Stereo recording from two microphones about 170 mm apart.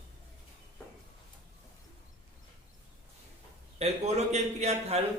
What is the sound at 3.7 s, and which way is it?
A man's voice, 40° right (ahead or behind).